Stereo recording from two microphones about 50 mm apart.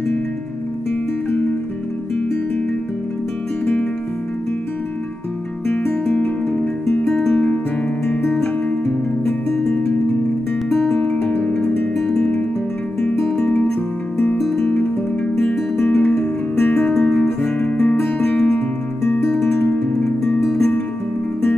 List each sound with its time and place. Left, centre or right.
7.1 s music: centre
7.3 s music: left
11.0 s music: left
14.6 s music: left
17.1 s guitar: centre
17.8 s music: left
19.2 s music: centre